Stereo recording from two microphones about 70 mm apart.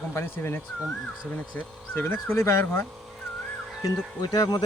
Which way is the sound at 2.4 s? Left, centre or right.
Left.